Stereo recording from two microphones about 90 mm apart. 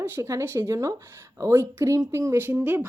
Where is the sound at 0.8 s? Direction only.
40° right (ahead or behind).